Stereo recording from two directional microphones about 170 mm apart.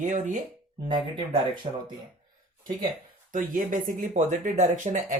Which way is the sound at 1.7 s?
45° right (ahead or behind).